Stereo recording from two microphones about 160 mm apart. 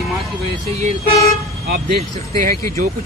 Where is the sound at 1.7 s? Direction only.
70° right (ahead or behind).